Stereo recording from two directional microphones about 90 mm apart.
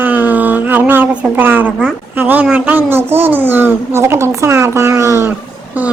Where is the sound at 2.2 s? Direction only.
20° right (ahead or behind).